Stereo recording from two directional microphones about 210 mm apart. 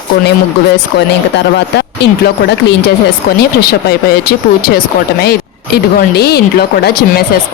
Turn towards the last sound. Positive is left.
turn(degrees=50)  # may be behind; listen again after turning